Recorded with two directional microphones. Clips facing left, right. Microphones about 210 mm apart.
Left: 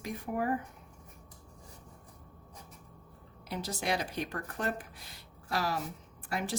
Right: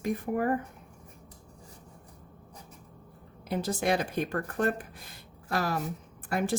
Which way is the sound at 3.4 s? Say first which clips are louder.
Right 6 dB; 55° right (ahead or behind).